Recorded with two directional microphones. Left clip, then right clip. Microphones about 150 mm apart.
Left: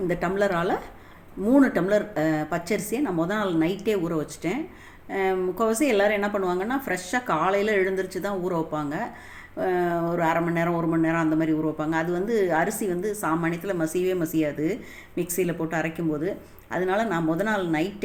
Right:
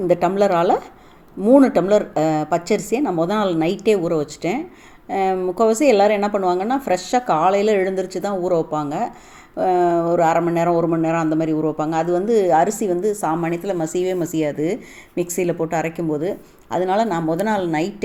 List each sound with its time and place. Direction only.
0.1 s speech: 40° right (ahead or behind)